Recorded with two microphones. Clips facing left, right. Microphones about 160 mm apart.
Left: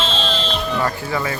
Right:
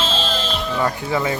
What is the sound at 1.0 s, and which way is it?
Speech, 20° right (ahead or behind).